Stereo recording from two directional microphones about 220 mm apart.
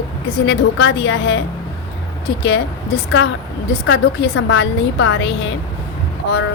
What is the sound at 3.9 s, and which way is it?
A woman's voice, 55° left (ahead or behind).